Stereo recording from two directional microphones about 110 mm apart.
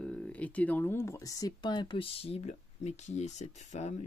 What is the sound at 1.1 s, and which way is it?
Speech, 35° left (ahead or behind).